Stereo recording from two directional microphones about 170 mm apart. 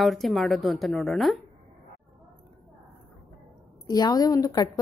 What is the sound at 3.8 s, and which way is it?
Speech, 20° left (ahead or behind).